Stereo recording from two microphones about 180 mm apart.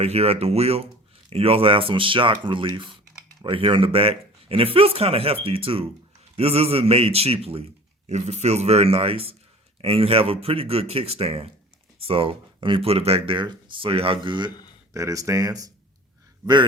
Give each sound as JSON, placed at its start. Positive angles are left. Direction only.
{"t": 0.0, "sound": "speech", "side_deg": -35}